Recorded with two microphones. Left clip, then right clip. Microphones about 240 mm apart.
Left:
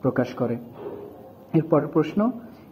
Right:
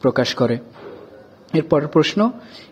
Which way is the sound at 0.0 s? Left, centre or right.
Right.